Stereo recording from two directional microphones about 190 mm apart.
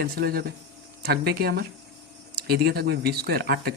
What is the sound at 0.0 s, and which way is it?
Speech, 55° right (ahead or behind).